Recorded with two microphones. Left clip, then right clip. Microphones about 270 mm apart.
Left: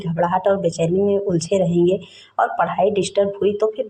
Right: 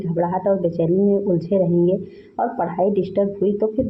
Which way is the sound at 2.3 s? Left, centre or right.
Left.